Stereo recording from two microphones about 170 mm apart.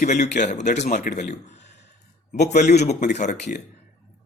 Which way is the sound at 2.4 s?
45° left (ahead or behind).